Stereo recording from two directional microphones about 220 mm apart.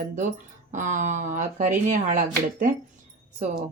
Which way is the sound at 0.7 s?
35° right (ahead or behind).